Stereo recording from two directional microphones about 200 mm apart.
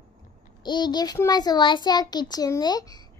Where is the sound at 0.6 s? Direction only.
20° left (ahead or behind).